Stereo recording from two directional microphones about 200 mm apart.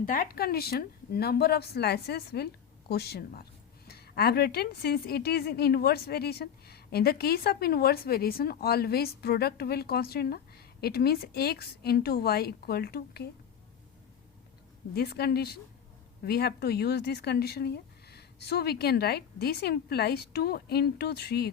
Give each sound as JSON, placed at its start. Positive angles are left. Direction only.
{"t": 0.0, "sound": "a woman's voice", "side_deg": 45}
{"t": 14.9, "sound": "a woman's voice", "side_deg": 50}